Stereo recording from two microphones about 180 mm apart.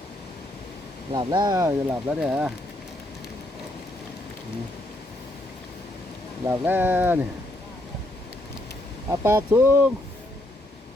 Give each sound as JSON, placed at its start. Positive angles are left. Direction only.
{"t": 1.1, "sound": "speech", "side_deg": -25}
{"t": 2.0, "sound": "speech", "side_deg": -5}
{"t": 6.5, "sound": "speech", "side_deg": -10}
{"t": 9.0, "sound": "speech", "side_deg": -15}